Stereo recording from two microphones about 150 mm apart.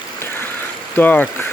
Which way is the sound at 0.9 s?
10° left (ahead or behind).